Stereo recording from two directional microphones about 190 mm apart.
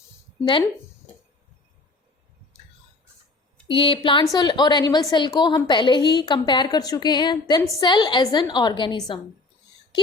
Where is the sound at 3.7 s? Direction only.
25° left (ahead or behind).